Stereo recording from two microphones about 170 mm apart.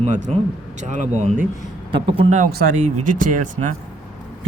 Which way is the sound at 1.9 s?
30° right (ahead or behind).